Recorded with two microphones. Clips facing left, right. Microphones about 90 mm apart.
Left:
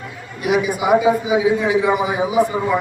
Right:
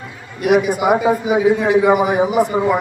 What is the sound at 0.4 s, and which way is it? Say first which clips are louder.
A man's voice: right 4 dB; 60° right (ahead or behind).